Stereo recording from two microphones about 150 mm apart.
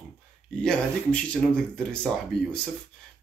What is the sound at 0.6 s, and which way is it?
Speech, 5° left (ahead or behind).